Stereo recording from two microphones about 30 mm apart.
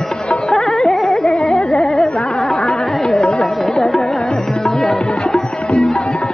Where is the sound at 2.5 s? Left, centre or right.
Left.